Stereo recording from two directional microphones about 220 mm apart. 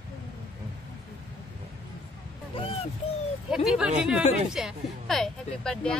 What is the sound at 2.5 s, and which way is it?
Speech, 25° left (ahead or behind).